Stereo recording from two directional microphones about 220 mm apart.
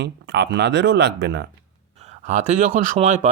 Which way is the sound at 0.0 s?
50° right (ahead or behind).